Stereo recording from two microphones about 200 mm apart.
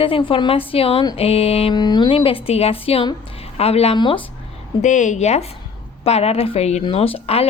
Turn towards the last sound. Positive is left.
turn(degrees=30)  # may be behind; listen again after turning